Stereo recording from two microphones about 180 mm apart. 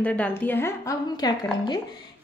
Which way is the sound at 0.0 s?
10° left (ahead or behind).